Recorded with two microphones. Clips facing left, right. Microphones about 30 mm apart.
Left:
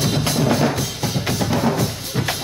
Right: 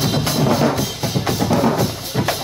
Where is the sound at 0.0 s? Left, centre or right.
Centre.